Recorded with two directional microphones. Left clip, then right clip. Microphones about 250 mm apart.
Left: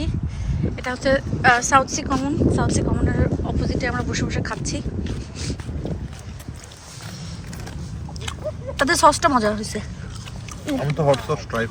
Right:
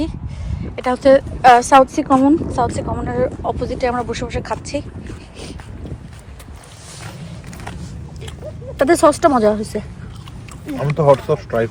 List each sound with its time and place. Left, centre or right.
0.0 s speech: centre
8.8 s speech: centre
10.9 s speech: right